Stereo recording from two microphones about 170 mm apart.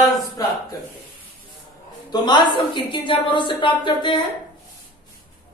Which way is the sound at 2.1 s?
25° left (ahead or behind).